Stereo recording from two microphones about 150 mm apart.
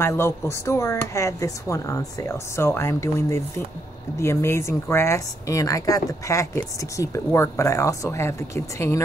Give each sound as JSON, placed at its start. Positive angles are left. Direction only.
{"t": 0.0, "sound": "speech", "side_deg": 15}